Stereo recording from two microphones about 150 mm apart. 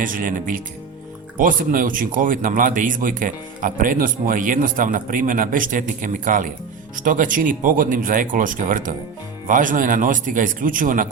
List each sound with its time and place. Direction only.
0.0 s a man's voice: 65° right (ahead or behind)